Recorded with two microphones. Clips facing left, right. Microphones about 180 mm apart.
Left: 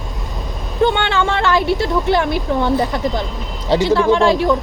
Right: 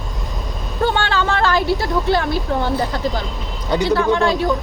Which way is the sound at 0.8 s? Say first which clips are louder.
Left 3 dB; 20° left (ahead or behind).